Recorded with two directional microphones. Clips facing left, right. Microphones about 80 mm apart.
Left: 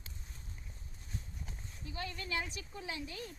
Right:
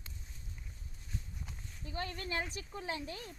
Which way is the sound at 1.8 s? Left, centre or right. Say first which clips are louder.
Right 2 dB; right.